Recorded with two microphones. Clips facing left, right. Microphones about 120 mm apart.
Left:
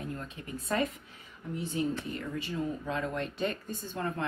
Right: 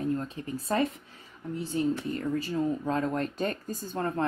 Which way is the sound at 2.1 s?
40° right (ahead or behind).